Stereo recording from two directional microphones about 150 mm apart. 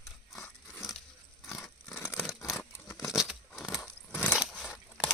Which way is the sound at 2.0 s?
20° left (ahead or behind).